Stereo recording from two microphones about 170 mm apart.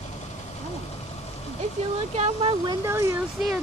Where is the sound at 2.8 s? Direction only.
15° right (ahead or behind).